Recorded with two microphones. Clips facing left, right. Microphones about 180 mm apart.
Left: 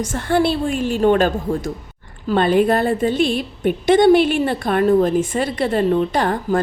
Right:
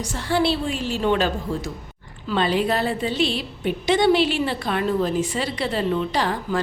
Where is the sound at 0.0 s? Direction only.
50° left (ahead or behind).